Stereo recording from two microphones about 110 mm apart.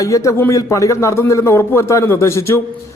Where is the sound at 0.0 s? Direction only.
30° left (ahead or behind).